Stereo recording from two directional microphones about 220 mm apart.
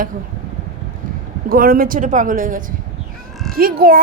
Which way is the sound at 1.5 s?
40° right (ahead or behind).